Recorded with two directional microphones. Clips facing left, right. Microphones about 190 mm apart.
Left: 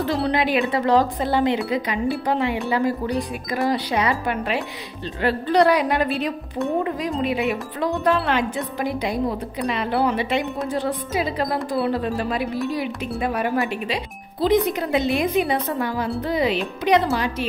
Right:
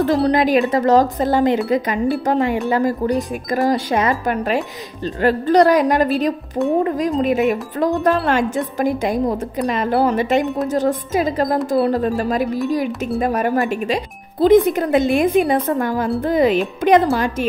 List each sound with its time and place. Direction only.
0.0 s speech: 45° right (ahead or behind)